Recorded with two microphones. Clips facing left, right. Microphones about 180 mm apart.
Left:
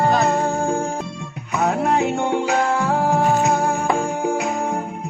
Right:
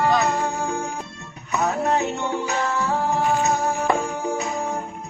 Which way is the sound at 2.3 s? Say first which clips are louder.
Left 5 dB; 55° left (ahead or behind).